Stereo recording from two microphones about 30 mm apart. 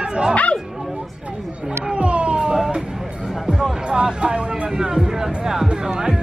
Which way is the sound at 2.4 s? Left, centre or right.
Right.